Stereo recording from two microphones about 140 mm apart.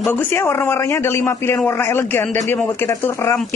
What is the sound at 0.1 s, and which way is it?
A man's voice, 15° left (ahead or behind).